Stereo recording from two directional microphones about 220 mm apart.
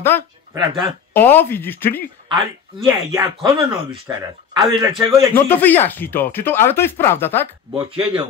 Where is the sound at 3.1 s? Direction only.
20° right (ahead or behind).